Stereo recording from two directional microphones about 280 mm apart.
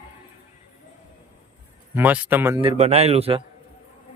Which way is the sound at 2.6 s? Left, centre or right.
Right.